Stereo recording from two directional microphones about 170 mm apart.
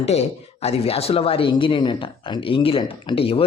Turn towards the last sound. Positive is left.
turn(degrees=35)  # may be behind; listen again after turning